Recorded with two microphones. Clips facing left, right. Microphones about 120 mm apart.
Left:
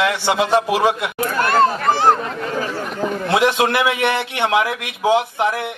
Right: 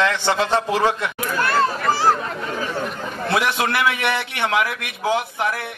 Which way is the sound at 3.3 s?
20° left (ahead or behind).